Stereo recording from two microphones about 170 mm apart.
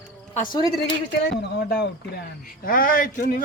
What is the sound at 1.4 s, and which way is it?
Speech, 75° left (ahead or behind).